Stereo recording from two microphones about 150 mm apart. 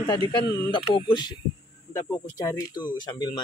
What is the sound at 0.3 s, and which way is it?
Speech, 30° left (ahead or behind).